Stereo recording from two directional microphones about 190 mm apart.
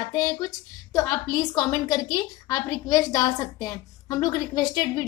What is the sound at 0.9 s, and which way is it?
A woman's voice, 20° left (ahead or behind).